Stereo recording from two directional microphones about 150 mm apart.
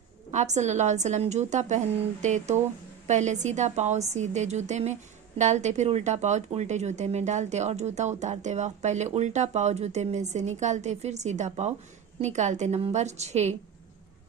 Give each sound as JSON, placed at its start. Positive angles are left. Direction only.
{"t": 0.3, "sound": "speech", "side_deg": -50}